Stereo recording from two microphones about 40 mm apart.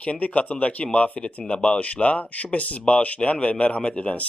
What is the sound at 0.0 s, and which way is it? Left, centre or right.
A man's voice, left.